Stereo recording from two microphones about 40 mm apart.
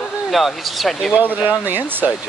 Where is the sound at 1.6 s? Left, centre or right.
Right.